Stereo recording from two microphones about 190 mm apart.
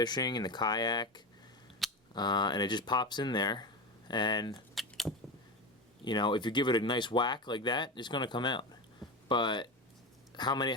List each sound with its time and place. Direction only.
0.0 s speech: 20° left (ahead or behind)
1.8 s gears: centre (ahead or behind)
2.1 s speech: 25° left (ahead or behind)
4.7 s a sound: centre (ahead or behind)
6.1 s a man's voice: 25° left (ahead or behind)